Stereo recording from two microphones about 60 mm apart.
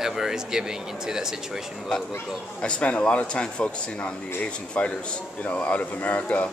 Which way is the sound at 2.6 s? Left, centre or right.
Centre.